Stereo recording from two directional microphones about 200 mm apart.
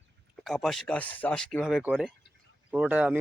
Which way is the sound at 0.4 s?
Centre (ahead or behind).